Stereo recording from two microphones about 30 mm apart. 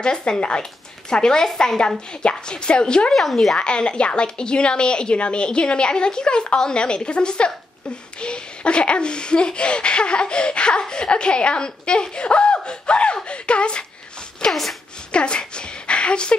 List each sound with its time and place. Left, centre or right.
0.0 s speech: left
2.2 s speech: left
3.1 s speech: centre
3.5 s speech: left
14.5 s speech: centre
15.0 s a woman's voice: left